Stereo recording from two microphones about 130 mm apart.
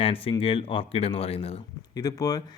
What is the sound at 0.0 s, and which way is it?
Speech, 45° left (ahead or behind).